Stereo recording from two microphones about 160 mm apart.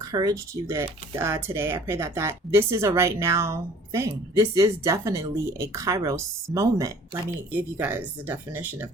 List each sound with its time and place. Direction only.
0.1 s speech: 25° right (ahead or behind)